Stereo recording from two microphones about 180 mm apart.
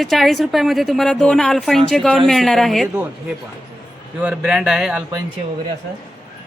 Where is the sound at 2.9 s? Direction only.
10° right (ahead or behind).